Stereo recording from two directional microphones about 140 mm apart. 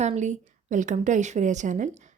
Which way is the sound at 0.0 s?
55° right (ahead or behind).